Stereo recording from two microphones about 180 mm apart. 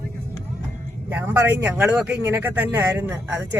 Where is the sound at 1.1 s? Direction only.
10° right (ahead or behind).